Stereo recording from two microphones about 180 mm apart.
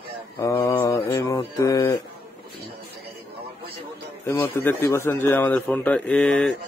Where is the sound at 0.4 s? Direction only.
20° left (ahead or behind).